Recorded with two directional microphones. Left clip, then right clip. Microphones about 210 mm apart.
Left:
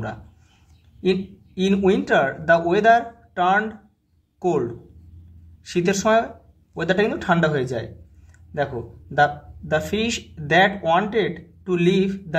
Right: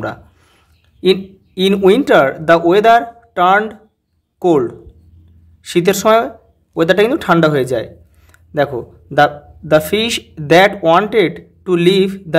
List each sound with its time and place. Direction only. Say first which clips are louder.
1.0 s speech: right 9 dB; 40° right (ahead or behind)